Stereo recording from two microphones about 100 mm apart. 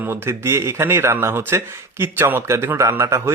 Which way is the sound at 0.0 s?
25° right (ahead or behind).